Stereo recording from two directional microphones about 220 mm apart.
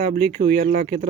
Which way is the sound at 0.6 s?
40° right (ahead or behind).